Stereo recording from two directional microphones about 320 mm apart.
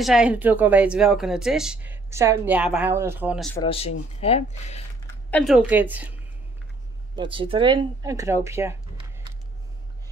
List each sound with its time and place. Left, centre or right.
0.0 s a woman's voice: centre
3.5 s speech: centre
5.3 s a woman's voice: centre
7.2 s speech: centre